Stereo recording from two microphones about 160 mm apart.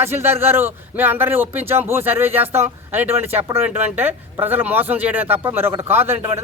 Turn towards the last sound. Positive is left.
turn(degrees=-15)  # may be behind; listen again after turning